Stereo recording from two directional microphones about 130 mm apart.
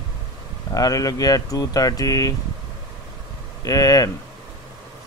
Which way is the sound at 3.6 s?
25° left (ahead or behind).